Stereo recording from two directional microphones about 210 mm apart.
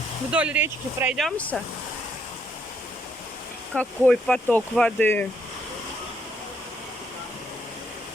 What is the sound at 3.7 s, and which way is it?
Speech, 5° left (ahead or behind).